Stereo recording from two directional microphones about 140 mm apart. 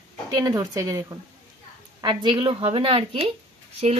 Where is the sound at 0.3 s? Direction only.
30° right (ahead or behind).